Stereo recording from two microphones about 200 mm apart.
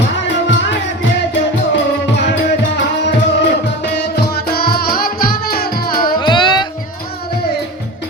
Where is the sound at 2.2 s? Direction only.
60° left (ahead or behind).